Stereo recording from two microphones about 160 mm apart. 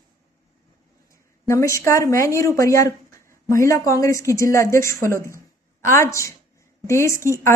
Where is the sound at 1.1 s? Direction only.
20° left (ahead or behind).